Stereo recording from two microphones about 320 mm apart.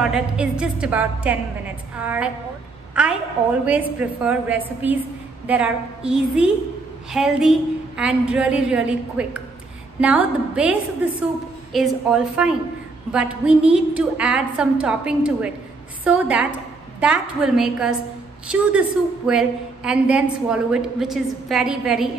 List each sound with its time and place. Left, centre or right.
0.0 s a woman's voice: centre
2.9 s a sound: centre
3.6 s a woman's voice: centre